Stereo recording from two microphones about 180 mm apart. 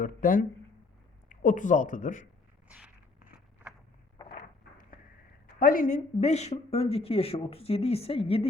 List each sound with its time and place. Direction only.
0.0 s speech: 50° left (ahead or behind)
2.6 s walk: 5° right (ahead or behind)
4.4 s a sound: 50° left (ahead or behind)
5.5 s a woman's voice: 50° left (ahead or behind); by 8.4 s 30° left (ahead or behind)